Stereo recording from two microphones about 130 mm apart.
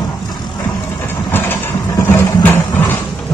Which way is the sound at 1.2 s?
15° left (ahead or behind).